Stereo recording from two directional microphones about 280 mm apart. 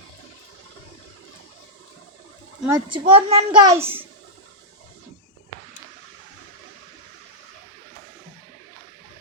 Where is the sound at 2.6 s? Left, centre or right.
Centre.